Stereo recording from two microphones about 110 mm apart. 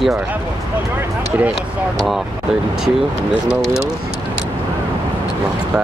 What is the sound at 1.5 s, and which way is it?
Speech, centre (ahead or behind).